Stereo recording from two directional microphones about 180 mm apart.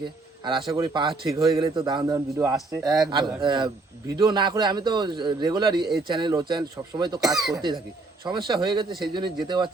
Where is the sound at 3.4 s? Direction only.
25° right (ahead or behind).